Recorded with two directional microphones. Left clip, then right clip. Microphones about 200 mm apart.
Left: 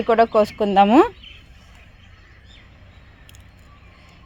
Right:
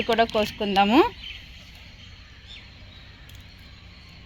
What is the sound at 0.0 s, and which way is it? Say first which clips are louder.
Speech: left 6 dB; 45° left (ahead or behind).